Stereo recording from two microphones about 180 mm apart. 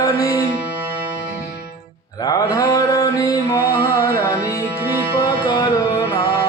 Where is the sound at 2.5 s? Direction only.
20° left (ahead or behind).